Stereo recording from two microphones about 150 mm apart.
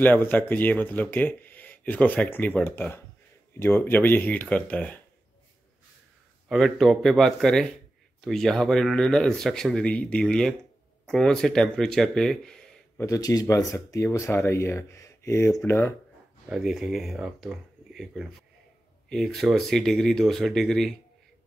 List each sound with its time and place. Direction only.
0.0 s speech: 10° left (ahead or behind)
6.5 s speech: centre (ahead or behind)
13.0 s speech: 20° left (ahead or behind)
16.4 s speech: centre (ahead or behind)